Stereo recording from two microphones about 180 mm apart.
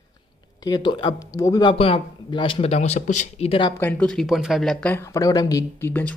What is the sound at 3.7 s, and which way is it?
Speech, 5° left (ahead or behind).